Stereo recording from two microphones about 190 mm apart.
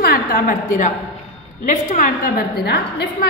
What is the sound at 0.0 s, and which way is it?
A woman's voice, 55° left (ahead or behind).